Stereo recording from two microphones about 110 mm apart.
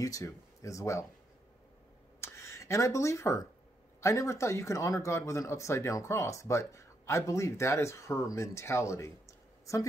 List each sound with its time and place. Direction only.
0.0 s speech: 30° left (ahead or behind)
2.1 s a sound: 25° left (ahead or behind)
4.0 s speech: 30° left (ahead or behind)